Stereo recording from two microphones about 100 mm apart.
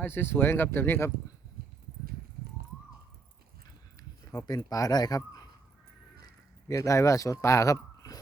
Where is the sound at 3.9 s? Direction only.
40° left (ahead or behind).